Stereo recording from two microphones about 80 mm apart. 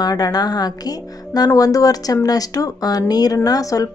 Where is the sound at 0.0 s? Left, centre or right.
Left.